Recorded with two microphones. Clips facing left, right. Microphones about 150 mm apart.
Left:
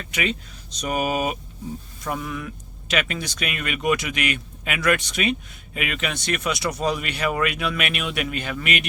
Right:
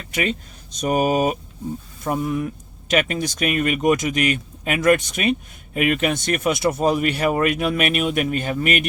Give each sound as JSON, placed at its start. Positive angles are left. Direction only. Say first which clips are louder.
{"t": 0.1, "sound": "speech", "louder": "right 3 dB", "side_deg": -50}